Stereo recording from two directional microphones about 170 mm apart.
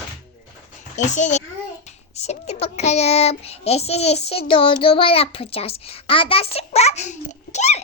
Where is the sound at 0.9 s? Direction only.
45° left (ahead or behind).